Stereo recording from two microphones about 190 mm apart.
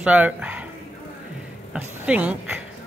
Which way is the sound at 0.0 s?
5° right (ahead or behind).